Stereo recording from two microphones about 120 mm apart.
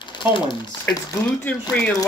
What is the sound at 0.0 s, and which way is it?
Speech, 40° left (ahead or behind).